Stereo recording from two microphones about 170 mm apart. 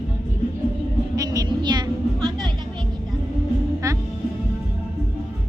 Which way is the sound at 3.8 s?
20° right (ahead or behind).